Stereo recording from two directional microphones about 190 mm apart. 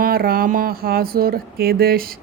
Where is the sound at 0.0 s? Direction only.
50° right (ahead or behind).